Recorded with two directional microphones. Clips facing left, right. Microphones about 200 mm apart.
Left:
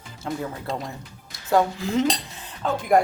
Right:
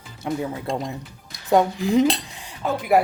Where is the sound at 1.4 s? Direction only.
15° right (ahead or behind).